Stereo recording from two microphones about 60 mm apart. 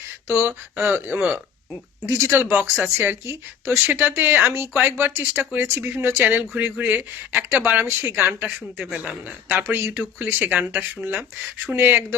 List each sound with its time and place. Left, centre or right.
0.3 s speech: right
2.0 s speech: right
5.3 s speech: right
5.5 s speech: right